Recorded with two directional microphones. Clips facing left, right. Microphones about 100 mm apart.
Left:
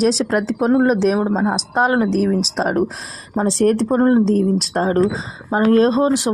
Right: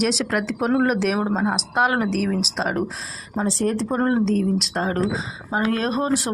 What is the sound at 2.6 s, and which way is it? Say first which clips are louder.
Speech: left 5 dB; 45° left (ahead or behind).